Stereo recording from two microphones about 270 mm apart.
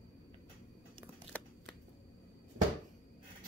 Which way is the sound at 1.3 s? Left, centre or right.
Centre.